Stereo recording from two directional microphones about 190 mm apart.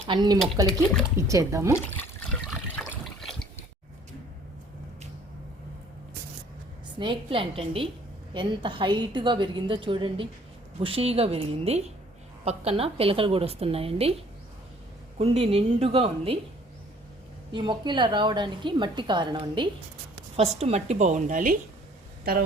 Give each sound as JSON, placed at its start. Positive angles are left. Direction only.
{"t": 0.1, "sound": "a woman's voice", "side_deg": -20}
{"t": 1.7, "sound": "trickle", "side_deg": 10}
{"t": 2.9, "sound": "water", "side_deg": 0}
{"t": 7.0, "sound": "a woman's voice", "side_deg": -25}
{"t": 15.2, "sound": "a woman's voice", "side_deg": -30}
{"t": 17.5, "sound": "a woman's voice", "side_deg": -25}